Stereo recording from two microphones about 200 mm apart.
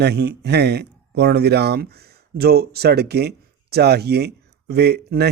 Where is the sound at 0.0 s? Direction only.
55° right (ahead or behind).